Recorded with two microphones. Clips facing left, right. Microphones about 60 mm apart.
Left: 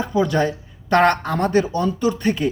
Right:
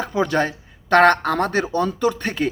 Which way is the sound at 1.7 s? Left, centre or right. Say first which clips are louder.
Even; right.